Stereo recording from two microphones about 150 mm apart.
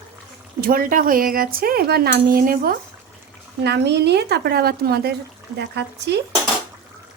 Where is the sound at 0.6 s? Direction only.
75° right (ahead or behind).